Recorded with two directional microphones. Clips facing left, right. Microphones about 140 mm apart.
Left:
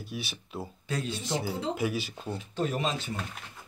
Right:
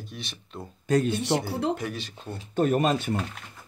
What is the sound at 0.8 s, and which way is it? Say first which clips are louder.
Speech: right 11 dB; 50° right (ahead or behind).